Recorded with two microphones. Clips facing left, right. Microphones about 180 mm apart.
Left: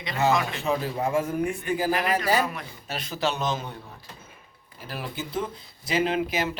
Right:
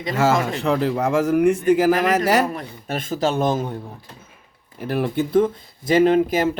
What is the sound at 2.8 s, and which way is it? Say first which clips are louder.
Speech: right 6 dB; 50° right (ahead or behind).